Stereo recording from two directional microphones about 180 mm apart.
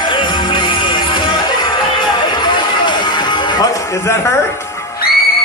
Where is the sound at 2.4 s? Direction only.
25° left (ahead or behind).